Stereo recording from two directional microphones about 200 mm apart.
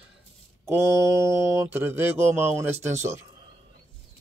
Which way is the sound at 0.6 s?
15° right (ahead or behind).